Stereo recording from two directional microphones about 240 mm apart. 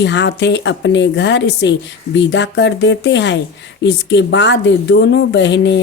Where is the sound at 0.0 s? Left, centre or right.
Left.